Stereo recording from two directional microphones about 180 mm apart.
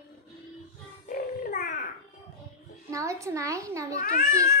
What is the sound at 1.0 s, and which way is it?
Grunt, 50° left (ahead or behind).